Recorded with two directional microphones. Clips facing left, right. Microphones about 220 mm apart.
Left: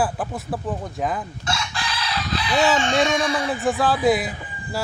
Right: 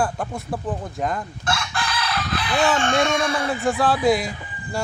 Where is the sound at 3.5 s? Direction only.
Centre (ahead or behind).